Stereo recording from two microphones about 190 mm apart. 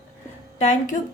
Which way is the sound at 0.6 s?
35° left (ahead or behind).